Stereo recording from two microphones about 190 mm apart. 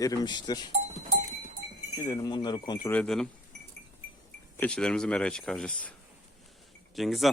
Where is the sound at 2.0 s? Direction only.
20° left (ahead or behind).